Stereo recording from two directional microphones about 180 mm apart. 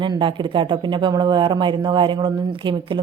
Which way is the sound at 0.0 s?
25° right (ahead or behind).